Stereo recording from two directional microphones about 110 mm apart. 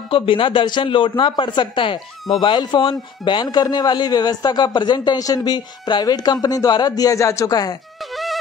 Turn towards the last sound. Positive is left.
turn(degrees=30)  # may be behind; listen again after turning